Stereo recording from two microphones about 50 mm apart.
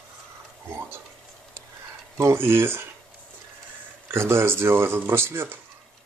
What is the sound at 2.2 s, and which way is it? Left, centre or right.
Speech, right.